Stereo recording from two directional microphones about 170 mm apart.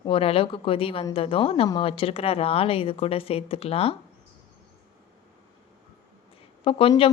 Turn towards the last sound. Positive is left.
turn(degrees=30)  # may be behind; listen again after turning